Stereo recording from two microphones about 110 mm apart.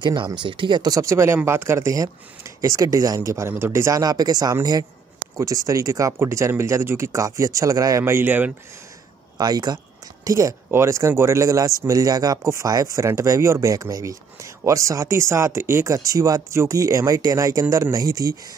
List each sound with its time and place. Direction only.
0.0 s speech: 45° right (ahead or behind)
8.0 s speech: 20° right (ahead or behind)
9.4 s speech: 35° right (ahead or behind)